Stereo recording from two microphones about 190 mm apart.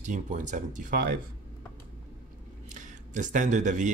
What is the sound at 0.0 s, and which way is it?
Speech, 40° right (ahead or behind).